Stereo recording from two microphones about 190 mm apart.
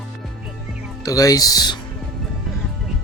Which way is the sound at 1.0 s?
20° left (ahead or behind).